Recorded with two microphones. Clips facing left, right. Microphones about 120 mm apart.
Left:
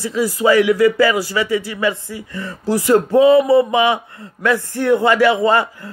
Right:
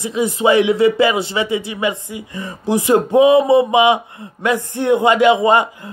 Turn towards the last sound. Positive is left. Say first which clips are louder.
# right 2 dB
turn(degrees=-15)  # may be behind; listen again after turning